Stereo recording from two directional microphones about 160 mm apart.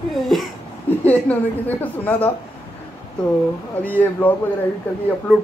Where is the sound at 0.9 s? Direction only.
10° left (ahead or behind).